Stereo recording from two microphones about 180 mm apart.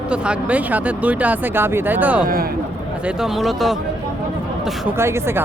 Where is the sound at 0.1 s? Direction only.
5° right (ahead or behind).